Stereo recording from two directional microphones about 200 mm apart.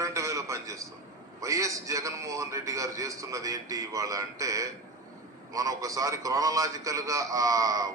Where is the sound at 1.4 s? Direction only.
15° right (ahead or behind).